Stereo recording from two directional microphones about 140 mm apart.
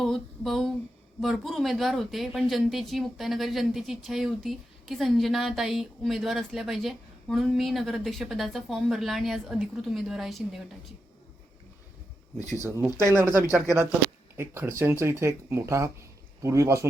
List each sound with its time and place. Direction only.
0.0 s speech: centre (ahead or behind)
12.5 s speech: 20° right (ahead or behind)